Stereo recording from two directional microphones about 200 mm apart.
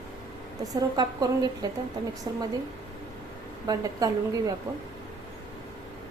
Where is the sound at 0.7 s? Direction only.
20° right (ahead or behind).